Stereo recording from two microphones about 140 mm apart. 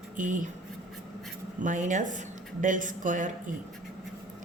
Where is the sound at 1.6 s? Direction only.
65° right (ahead or behind).